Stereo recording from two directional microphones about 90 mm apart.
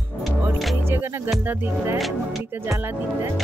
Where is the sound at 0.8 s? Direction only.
25° right (ahead or behind).